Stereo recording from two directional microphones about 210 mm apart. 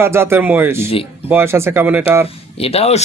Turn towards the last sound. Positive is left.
turn(degrees=30)  # may be behind; listen again after turning